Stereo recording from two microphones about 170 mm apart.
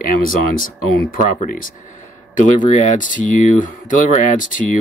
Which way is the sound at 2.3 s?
50° left (ahead or behind).